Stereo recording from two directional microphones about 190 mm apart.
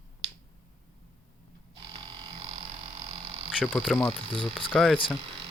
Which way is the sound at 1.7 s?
25° right (ahead or behind).